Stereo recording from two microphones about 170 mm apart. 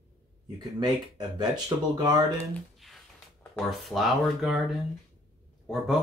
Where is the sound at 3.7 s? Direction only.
Centre (ahead or behind).